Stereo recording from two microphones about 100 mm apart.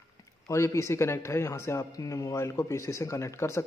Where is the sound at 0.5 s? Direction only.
30° left (ahead or behind).